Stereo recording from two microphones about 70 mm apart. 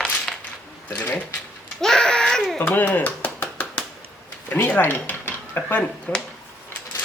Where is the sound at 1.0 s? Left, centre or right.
Left.